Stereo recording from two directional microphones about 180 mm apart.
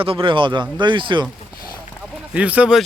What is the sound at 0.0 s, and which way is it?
Speech, 30° right (ahead or behind).